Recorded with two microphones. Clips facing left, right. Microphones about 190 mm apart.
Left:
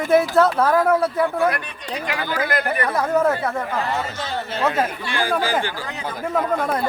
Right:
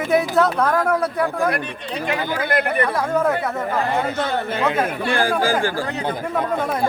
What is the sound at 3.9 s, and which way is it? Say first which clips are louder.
A man's voice: right 4 dB; 55° right (ahead or behind).